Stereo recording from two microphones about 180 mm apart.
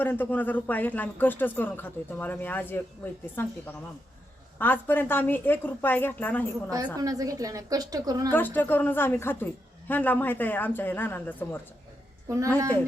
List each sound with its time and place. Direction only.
0.0 s speech: 10° left (ahead or behind)
6.9 s a woman's voice: 20° right (ahead or behind)
8.3 s speech: 10° left (ahead or behind)